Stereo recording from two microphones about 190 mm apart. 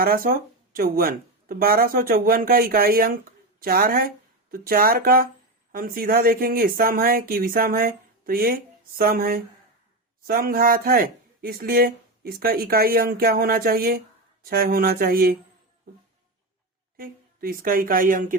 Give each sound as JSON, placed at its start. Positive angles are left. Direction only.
{"t": 0.0, "sound": "speech", "side_deg": -50}
{"t": 17.0, "sound": "a woman's voice", "side_deg": -50}